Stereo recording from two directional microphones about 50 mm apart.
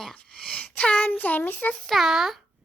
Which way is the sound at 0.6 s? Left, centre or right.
Left.